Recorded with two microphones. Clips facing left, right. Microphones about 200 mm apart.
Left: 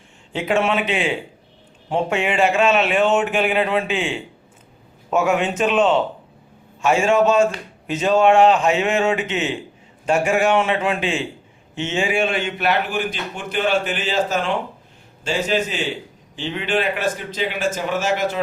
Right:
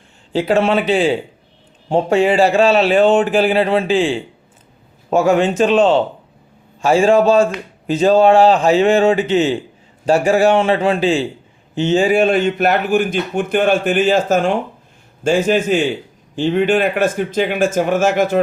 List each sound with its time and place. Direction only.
0.3 s a man's voice: 35° right (ahead or behind)